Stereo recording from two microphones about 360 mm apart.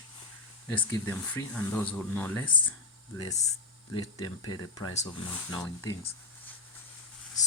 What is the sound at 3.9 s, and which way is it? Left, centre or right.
Speech, left.